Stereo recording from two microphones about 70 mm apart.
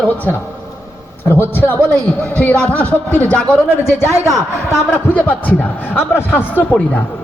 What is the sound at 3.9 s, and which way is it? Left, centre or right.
Speech, left.